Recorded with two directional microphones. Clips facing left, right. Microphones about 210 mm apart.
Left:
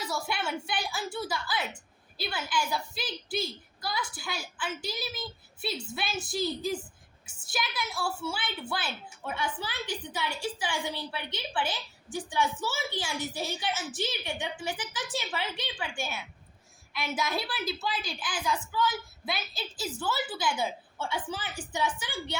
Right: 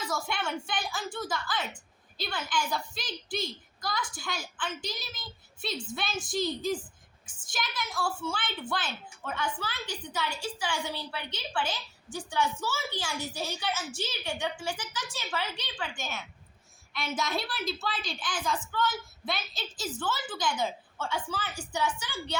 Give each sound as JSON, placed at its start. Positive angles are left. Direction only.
{"t": 0.3, "sound": "a woman's voice", "side_deg": 5}